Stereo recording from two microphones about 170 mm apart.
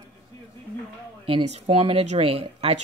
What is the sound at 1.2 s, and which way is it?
Speech, 35° right (ahead or behind).